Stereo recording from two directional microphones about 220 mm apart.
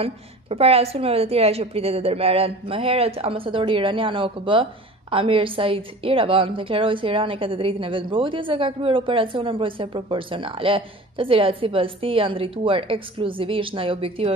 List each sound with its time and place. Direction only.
0.0 s a woman's voice: 25° right (ahead or behind)